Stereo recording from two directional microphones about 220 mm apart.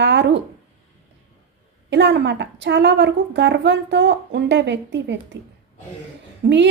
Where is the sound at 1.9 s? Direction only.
55° right (ahead or behind).